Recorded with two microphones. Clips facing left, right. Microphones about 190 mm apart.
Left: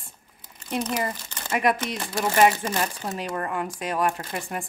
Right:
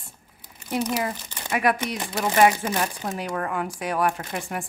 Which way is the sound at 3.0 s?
Centre (ahead or behind).